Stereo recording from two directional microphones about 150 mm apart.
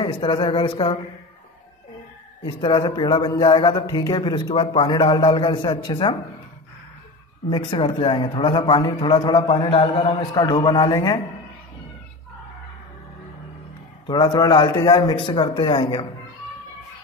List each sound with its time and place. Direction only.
0.0 s a man's voice: 35° left (ahead or behind)
2.4 s a man's voice: 30° left (ahead or behind)
7.4 s a man's voice: 35° left (ahead or behind)
9.7 s a man's voice: 40° left (ahead or behind)
14.0 s a man's voice: 30° left (ahead or behind)